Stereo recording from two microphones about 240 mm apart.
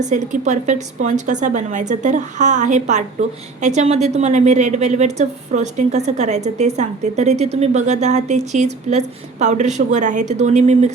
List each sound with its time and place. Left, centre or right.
0.0 s a woman's voice: right